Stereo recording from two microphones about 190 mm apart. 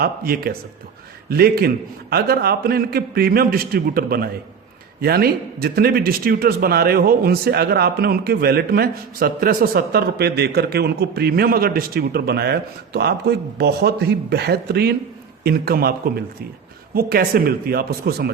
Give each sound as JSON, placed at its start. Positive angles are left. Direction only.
{"t": 0.0, "sound": "a man's voice", "side_deg": -50}